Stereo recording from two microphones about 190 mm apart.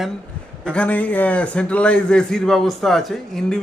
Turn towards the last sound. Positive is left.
turn(degrees=5)  # may be behind; listen again after turning